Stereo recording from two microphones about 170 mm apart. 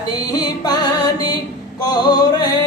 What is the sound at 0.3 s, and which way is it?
Music, 25° left (ahead or behind).